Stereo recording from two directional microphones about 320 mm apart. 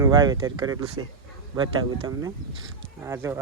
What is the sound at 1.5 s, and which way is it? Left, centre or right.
Speech, centre.